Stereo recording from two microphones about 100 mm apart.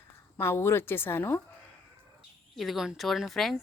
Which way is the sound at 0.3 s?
25° left (ahead or behind).